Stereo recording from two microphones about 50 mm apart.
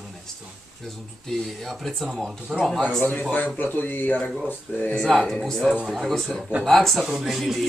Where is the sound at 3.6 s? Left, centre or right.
Left.